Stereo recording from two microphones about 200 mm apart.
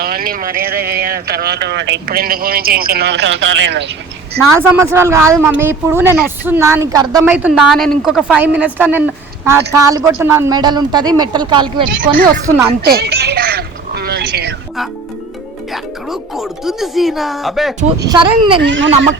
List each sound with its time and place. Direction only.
0.0 s speech: 45° right (ahead or behind)
4.5 s a woman's voice: 10° right (ahead or behind)
7.3 s a woman's voice: 10° right (ahead or behind); by 11.9 s 25° right (ahead or behind)
11.9 s speech: 45° right (ahead or behind)
15.7 s speech: centre (ahead or behind)
18.0 s speech: 20° right (ahead or behind)
18.6 s speech: 70° right (ahead or behind)